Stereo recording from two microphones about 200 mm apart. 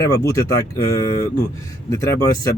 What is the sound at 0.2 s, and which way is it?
Speech, 15° left (ahead or behind).